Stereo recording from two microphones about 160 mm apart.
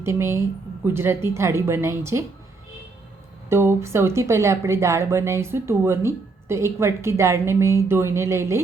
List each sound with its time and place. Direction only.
0.0 s speech: 15° right (ahead or behind)
3.5 s speech: 15° right (ahead or behind)